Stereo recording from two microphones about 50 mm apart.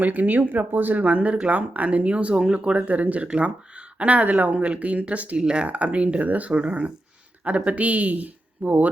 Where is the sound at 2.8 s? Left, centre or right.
Right.